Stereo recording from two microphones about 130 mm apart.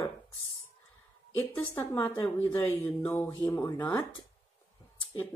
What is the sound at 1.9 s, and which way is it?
Speech, 15° left (ahead or behind).